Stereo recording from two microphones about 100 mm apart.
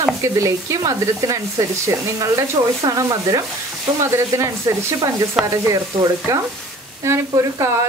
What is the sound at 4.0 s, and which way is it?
Stir, 30° right (ahead or behind).